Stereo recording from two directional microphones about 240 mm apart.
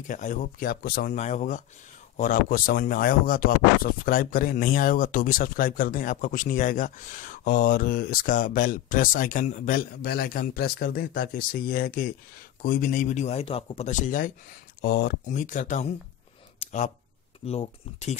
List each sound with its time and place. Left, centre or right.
0.0 s speech: left
16.5 s a sound: left
17.5 s speech: left